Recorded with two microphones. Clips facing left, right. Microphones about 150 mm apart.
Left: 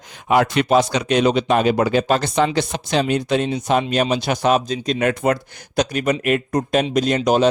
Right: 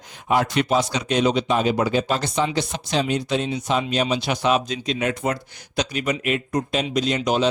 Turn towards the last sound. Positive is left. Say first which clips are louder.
# left 5 dB
turn(degrees=45)  # may be behind; listen again after turning